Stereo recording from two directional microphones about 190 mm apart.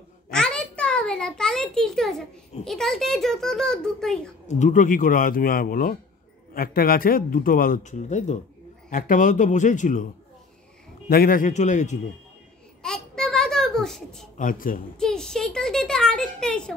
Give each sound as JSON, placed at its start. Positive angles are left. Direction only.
{"t": 0.3, "sound": "a sound", "side_deg": 5}
{"t": 2.6, "sound": "a child's voice", "side_deg": 0}
{"t": 4.5, "sound": "a man's voice", "side_deg": 40}
{"t": 11.1, "sound": "speech", "side_deg": 50}
{"t": 12.8, "sound": "babbling", "side_deg": 5}
{"t": 14.4, "sound": "a man's voice", "side_deg": 45}
{"t": 15.0, "sound": "a child's voice", "side_deg": 5}